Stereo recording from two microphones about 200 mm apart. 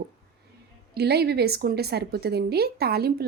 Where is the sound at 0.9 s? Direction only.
55° right (ahead or behind).